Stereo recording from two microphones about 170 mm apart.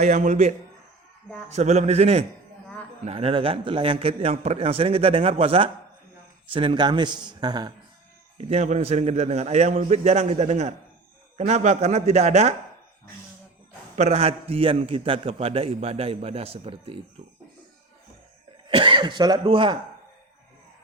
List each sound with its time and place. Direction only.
0.0 s a man's voice: 45° right (ahead or behind); by 7.7 s 25° right (ahead or behind)
8.4 s a man's voice: 40° right (ahead or behind)
13.9 s a man's voice: 40° right (ahead or behind)
18.7 s speech: 30° right (ahead or behind)